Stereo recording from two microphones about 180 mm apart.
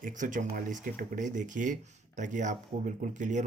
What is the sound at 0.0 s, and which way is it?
Speech, 45° right (ahead or behind).